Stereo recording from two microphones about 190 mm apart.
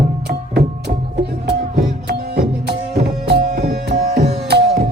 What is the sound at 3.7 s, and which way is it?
Music, 60° right (ahead or behind).